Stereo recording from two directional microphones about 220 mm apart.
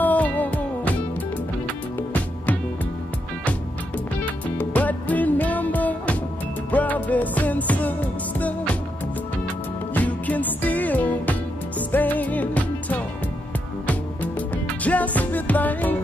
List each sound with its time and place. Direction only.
0.0 s music: 5° left (ahead or behind)
2.0 s music: 5° left (ahead or behind)
4.6 s music: 5° left (ahead or behind)
9.9 s music: 5° left (ahead or behind)